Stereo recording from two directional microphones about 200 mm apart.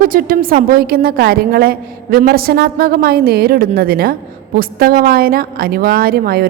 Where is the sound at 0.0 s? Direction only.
45° right (ahead or behind).